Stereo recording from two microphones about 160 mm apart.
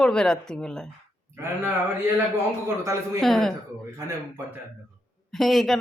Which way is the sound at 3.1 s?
Centre (ahead or behind).